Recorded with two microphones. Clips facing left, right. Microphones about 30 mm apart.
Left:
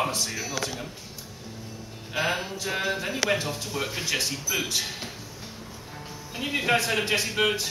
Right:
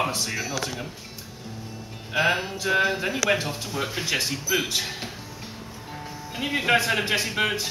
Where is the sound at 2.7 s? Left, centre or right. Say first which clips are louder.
Right 6 dB; right.